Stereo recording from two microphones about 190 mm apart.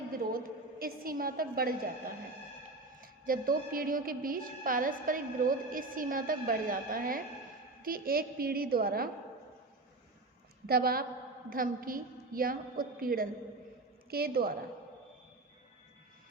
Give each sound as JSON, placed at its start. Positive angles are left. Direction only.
{"t": 0.1, "sound": "a woman's voice", "side_deg": -50}
{"t": 3.0, "sound": "a woman's voice", "side_deg": -50}
{"t": 10.7, "sound": "a woman's voice", "side_deg": -50}